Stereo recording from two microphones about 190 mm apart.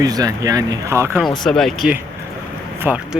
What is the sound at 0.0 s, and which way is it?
Speech, 20° right (ahead or behind).